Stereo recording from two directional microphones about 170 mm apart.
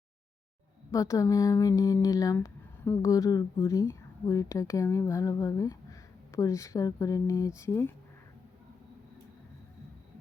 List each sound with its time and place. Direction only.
0.9 s speech: 20° left (ahead or behind)